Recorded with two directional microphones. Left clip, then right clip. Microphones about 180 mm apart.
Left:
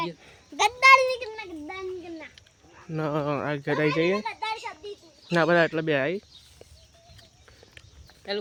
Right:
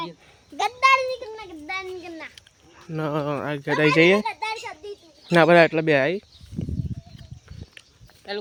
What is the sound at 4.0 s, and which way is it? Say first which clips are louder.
Speech: right 8 dB; 25° right (ahead or behind).